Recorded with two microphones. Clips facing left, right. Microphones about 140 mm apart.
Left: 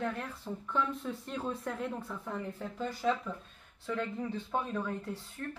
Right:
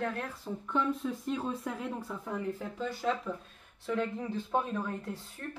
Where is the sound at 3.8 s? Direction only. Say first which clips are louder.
Right 2 dB; 10° right (ahead or behind).